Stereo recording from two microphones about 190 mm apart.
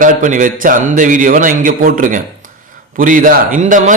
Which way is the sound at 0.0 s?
45° right (ahead or behind).